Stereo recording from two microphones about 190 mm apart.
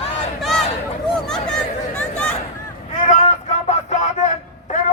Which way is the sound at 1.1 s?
5° left (ahead or behind).